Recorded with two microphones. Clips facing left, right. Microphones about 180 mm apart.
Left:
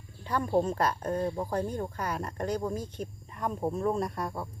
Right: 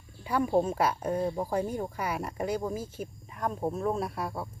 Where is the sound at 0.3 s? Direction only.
10° right (ahead or behind).